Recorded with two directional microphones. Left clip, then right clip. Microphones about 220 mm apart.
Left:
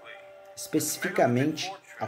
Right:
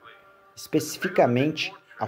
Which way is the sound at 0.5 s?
20° right (ahead or behind).